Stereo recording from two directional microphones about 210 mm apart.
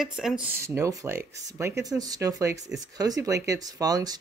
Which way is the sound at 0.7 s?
15° right (ahead or behind).